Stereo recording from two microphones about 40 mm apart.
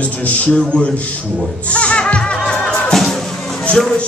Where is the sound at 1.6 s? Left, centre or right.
Left.